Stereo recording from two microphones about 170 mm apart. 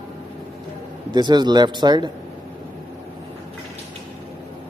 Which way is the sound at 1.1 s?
25° right (ahead or behind).